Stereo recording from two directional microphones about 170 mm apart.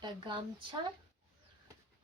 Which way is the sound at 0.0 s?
30° right (ahead or behind).